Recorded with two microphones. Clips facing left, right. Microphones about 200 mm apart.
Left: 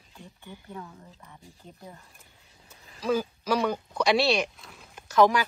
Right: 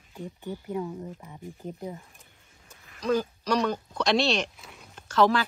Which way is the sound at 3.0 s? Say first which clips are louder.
Right 1 dB; 5° left (ahead or behind).